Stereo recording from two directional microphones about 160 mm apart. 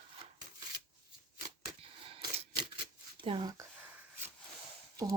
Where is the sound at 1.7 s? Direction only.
35° right (ahead or behind).